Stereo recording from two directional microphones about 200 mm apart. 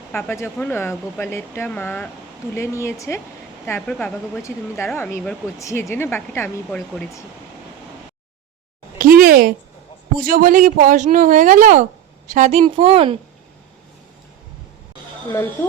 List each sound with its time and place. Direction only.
0.1 s speech: 10° left (ahead or behind)
6.7 s speech: centre (ahead or behind)
9.0 s a sound: 45° right (ahead or behind)
10.2 s speech: 45° right (ahead or behind); by 13.1 s 25° right (ahead or behind)